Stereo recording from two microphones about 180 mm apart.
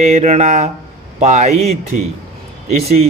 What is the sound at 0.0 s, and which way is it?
A man's voice, 35° right (ahead or behind).